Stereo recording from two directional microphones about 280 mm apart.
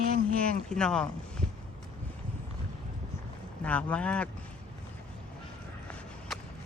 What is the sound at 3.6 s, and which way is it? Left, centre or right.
Speech, centre.